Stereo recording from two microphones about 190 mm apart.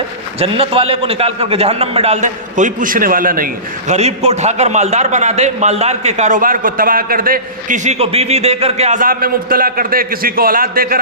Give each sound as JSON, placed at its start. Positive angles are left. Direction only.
{"t": 0.3, "sound": "a man's voice", "side_deg": -30}